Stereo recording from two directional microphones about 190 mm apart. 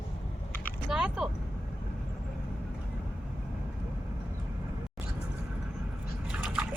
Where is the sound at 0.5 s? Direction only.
10° left (ahead or behind).